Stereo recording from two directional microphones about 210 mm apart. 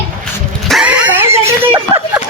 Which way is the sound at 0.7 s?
5° right (ahead or behind).